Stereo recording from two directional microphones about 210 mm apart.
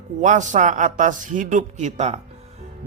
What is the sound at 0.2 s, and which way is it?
A man's voice, 35° right (ahead or behind).